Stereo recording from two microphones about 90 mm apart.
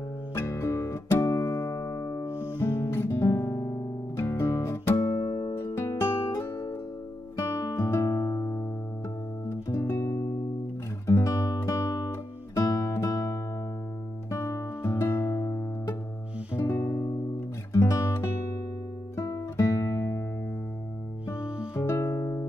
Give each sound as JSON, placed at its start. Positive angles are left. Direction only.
{"t": 0.3, "sound": "music", "side_deg": 30}
{"t": 5.0, "sound": "music", "side_deg": 40}
{"t": 5.6, "sound": "music", "side_deg": 25}
{"t": 14.3, "sound": "music", "side_deg": 35}
{"t": 16.5, "sound": "guitar", "side_deg": 25}
{"t": 21.4, "sound": "music", "side_deg": -10}
{"t": 21.7, "sound": "music", "side_deg": 30}